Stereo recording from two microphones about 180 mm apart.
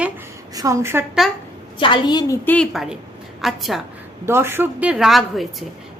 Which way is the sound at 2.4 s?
5° left (ahead or behind).